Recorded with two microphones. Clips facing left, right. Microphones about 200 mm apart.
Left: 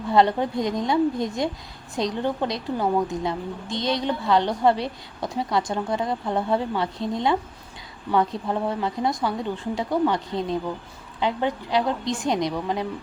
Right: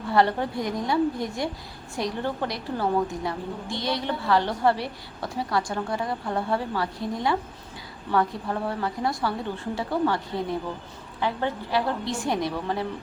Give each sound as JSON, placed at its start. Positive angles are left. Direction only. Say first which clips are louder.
{"t": 0.1, "sound": "a woman's voice", "louder": "left 3 dB", "side_deg": 20}